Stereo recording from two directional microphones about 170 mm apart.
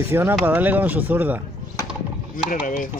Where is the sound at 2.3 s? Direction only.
55° left (ahead or behind).